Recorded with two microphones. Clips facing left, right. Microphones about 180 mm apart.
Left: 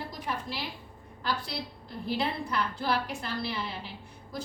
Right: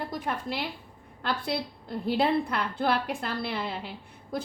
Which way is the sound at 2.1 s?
55° right (ahead or behind).